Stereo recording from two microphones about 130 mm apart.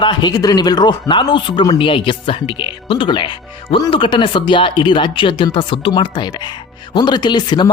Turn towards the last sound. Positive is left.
turn(degrees=35)  # may be behind; listen again after turning